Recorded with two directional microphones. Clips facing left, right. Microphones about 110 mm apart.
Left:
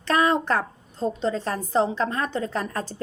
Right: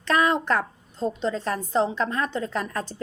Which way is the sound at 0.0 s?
35° left (ahead or behind).